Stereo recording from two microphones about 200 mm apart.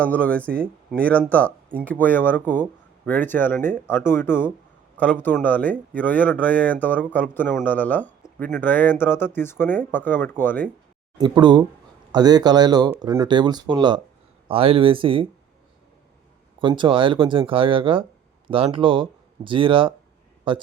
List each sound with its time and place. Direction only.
0.0 s speech: 5° left (ahead or behind)
11.2 s speech: 20° right (ahead or behind)
16.6 s speech: 25° right (ahead or behind)